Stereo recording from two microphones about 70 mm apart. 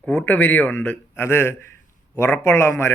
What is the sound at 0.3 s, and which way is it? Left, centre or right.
Speech, left.